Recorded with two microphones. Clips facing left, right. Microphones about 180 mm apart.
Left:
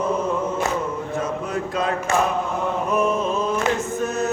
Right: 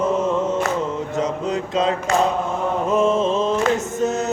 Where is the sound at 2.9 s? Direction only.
25° right (ahead or behind).